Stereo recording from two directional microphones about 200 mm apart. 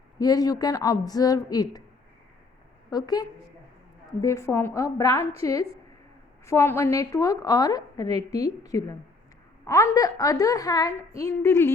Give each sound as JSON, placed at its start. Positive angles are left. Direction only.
{"t": 0.2, "sound": "a woman's voice", "side_deg": 20}
{"t": 2.9, "sound": "a woman's voice", "side_deg": 20}